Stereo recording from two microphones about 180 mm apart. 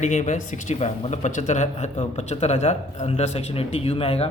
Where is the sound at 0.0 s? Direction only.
40° left (ahead or behind).